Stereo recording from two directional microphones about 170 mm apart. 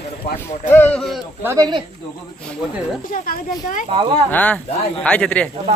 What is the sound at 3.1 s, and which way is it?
Speech, 55° left (ahead or behind).